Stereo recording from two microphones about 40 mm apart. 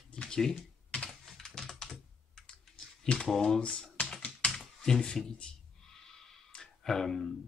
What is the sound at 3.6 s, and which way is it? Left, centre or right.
Speech, left.